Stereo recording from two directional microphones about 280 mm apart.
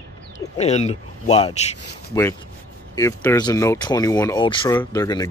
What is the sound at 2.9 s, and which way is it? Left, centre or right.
Speech, centre.